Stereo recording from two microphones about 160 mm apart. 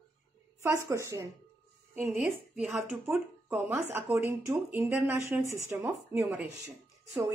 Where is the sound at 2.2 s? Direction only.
Centre (ahead or behind).